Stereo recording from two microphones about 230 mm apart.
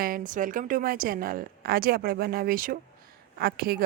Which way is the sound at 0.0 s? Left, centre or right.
Right.